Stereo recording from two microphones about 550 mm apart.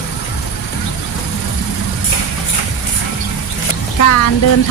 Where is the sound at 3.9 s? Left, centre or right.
Left.